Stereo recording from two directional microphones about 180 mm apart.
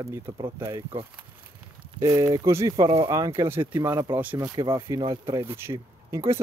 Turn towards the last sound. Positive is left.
turn(degrees=-15)  # may be behind; listen again after turning